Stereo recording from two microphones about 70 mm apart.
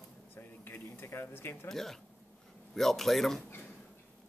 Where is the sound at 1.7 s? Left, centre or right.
Centre.